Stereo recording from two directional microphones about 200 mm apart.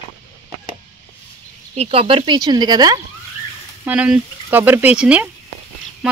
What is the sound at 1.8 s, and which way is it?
Speech, 30° right (ahead or behind).